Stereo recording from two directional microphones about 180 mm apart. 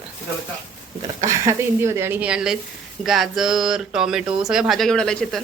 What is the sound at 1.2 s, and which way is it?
Speech, 15° right (ahead or behind).